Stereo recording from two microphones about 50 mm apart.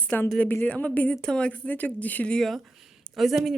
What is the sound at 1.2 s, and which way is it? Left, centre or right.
Speech, centre.